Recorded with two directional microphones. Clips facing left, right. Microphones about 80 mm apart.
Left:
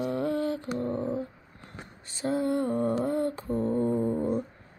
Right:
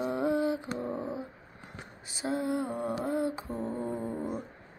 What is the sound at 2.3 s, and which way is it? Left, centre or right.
Mantra, centre.